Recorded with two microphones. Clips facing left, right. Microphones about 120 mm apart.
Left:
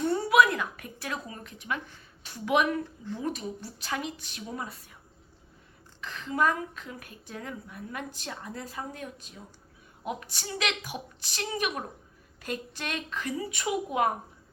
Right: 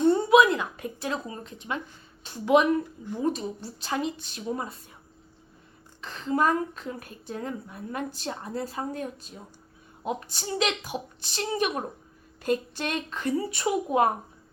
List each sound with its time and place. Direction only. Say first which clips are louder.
0.0 s a sound: right 4 dB; 25° right (ahead or behind)
2.2 s a woman's voice: right 5 dB; 25° right (ahead or behind)
6.0 s a woman's voice: right 3 dB; 35° right (ahead or behind)